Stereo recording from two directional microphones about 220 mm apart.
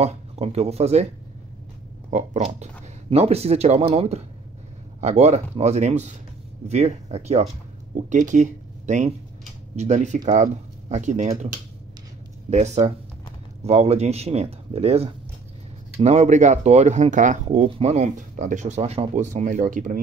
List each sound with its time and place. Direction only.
0.0 s speech: 30° right (ahead or behind)
2.0 s speech: 30° right (ahead or behind)